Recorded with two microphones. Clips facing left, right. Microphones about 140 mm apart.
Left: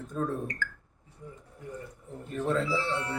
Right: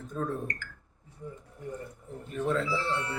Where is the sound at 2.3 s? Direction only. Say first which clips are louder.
Left 1 dB; centre (ahead or behind).